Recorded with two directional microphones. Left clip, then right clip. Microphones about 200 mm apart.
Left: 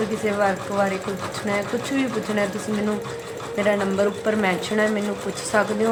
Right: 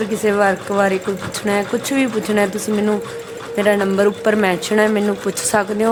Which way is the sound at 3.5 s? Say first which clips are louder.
Right 5 dB; 40° right (ahead or behind).